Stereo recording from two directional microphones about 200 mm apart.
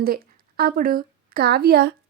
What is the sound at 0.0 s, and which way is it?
A woman's voice, 50° right (ahead or behind).